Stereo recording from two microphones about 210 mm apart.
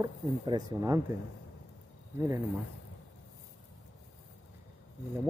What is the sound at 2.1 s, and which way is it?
Speech, 10° right (ahead or behind).